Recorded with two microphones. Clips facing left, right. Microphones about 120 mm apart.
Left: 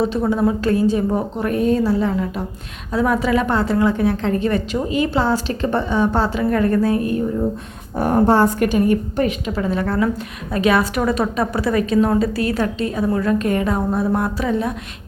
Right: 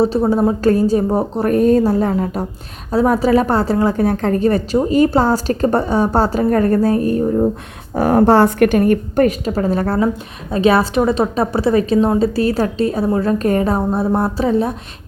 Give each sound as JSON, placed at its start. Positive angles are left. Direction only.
{"t": 0.0, "sound": "a woman's voice", "side_deg": -35}
{"t": 7.9, "sound": "a woman's voice", "side_deg": -90}
{"t": 8.8, "sound": "a woman's voice", "side_deg": -50}